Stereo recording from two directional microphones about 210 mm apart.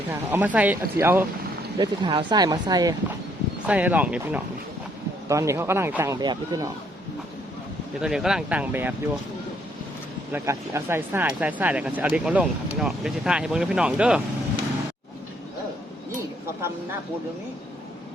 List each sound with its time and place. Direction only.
0.1 s speech: 10° right (ahead or behind)
3.7 s speech: 5° right (ahead or behind)
7.9 s speech: centre (ahead or behind)
10.3 s speech: 15° right (ahead or behind)